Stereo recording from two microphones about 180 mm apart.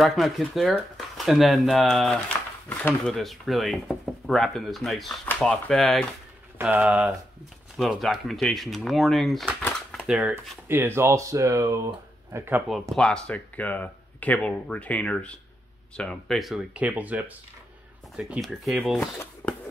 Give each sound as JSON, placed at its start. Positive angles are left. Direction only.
{"t": 0.0, "sound": "speech", "side_deg": 0}
{"t": 6.6, "sound": "speech", "side_deg": -5}
{"t": 9.6, "sound": "typewriter", "side_deg": 10}
{"t": 10.0, "sound": "speech", "side_deg": -5}
{"t": 12.9, "sound": "speech", "side_deg": 5}
{"t": 18.9, "sound": "speech", "side_deg": 10}